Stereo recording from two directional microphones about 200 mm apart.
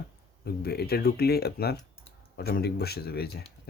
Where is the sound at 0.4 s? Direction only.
50° left (ahead or behind).